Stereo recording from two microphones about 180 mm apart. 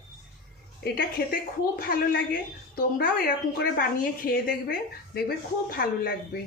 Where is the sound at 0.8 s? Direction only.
55° left (ahead or behind).